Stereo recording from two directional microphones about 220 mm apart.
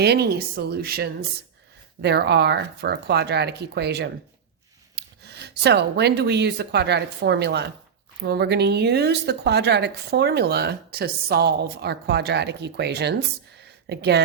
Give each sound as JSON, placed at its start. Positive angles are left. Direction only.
{"t": 0.0, "sound": "speech", "side_deg": -45}